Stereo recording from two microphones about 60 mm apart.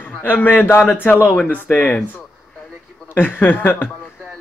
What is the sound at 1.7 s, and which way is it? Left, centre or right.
Speech, centre.